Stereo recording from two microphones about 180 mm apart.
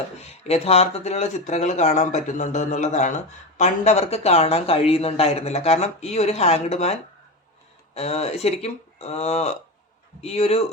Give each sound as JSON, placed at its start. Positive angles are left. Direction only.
{"t": 0.2, "sound": "speech", "side_deg": 35}
{"t": 7.9, "sound": "speech", "side_deg": 35}